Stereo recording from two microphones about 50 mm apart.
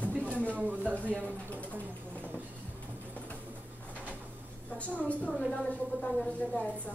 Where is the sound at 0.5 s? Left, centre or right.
Right.